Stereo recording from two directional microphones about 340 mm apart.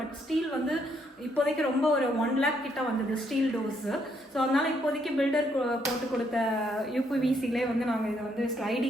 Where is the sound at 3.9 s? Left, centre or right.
Centre.